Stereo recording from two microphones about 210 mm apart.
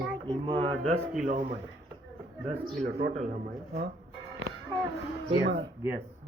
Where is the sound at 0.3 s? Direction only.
25° right (ahead or behind).